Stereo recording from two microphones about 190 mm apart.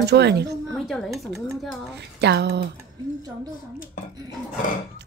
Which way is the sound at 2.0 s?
65° right (ahead or behind).